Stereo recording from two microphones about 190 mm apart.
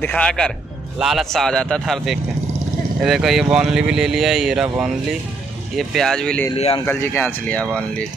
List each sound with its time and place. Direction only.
0.0 s speech: 5° left (ahead or behind)
6.5 s speech: 30° left (ahead or behind)
6.9 s speech: 10° left (ahead or behind)